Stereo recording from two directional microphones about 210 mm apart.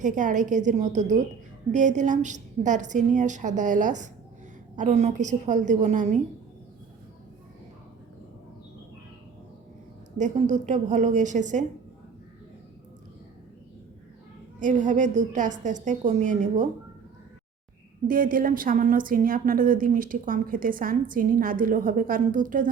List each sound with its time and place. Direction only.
0.0 s a woman's voice: 35° right (ahead or behind)
10.2 s a woman's voice: 35° right (ahead or behind)
14.6 s a woman's voice: 35° right (ahead or behind)
18.1 s a woman's voice: 40° right (ahead or behind)